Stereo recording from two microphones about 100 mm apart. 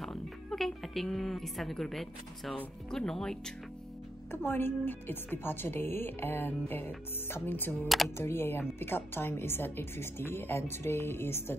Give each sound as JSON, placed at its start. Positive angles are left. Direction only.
{"t": 0.0, "sound": "speech", "side_deg": 5}
{"t": 4.3, "sound": "speech", "side_deg": 20}